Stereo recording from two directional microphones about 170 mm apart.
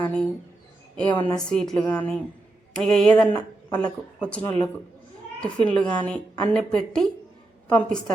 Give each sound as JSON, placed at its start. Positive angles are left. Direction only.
{"t": 0.0, "sound": "speech", "side_deg": 5}
{"t": 1.1, "sound": "a woman's voice", "side_deg": 30}
{"t": 1.4, "sound": "a woman's voice", "side_deg": 5}